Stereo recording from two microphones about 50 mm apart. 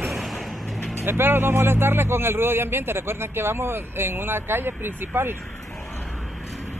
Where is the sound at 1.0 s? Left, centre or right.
Right.